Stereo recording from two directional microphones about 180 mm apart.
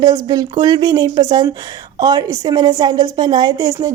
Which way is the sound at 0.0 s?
15° right (ahead or behind).